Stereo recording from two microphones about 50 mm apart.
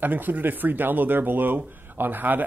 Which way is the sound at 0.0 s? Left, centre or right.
Right.